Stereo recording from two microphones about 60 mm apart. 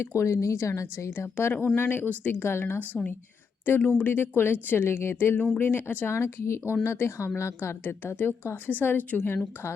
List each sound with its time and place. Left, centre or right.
0.0 s speech: left
2.7 s speech: left
6.1 s speech: left